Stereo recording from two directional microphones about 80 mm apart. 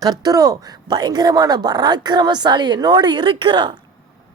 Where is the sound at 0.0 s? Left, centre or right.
Right.